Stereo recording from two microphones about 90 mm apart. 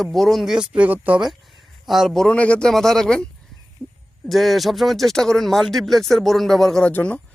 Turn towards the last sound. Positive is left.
turn(degrees=15)  # may be behind; listen again after turning